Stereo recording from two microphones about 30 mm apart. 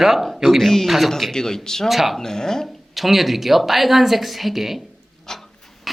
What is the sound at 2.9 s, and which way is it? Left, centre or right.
A woman's voice, centre.